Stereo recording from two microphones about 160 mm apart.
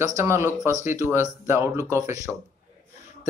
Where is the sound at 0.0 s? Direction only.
20° right (ahead or behind).